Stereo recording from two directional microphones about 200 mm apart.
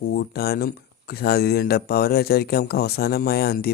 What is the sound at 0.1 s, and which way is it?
Speech, 55° left (ahead or behind).